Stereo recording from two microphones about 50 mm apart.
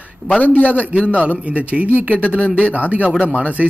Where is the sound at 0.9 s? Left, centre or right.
Right.